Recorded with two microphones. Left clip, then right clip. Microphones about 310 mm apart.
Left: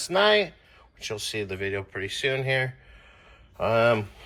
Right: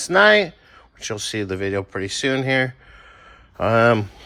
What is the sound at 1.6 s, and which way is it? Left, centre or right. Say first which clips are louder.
Speech: right 6 dB; right.